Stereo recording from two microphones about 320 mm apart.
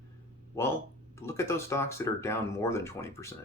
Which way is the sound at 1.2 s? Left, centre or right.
Centre.